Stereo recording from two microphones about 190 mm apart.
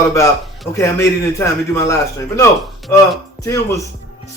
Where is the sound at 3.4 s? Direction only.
15° left (ahead or behind).